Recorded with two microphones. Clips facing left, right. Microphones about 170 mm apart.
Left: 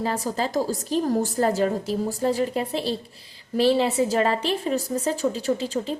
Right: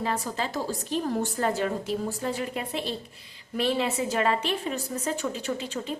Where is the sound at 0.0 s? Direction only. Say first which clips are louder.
Left 4 dB; 35° left (ahead or behind).